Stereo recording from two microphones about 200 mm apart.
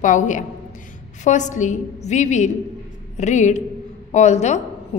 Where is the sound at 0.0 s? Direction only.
40° left (ahead or behind).